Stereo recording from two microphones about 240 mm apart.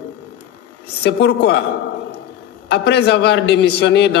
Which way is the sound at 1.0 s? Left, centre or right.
Left.